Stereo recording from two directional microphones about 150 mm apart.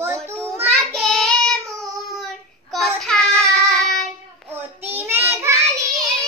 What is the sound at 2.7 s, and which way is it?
Child singing, centre (ahead or behind).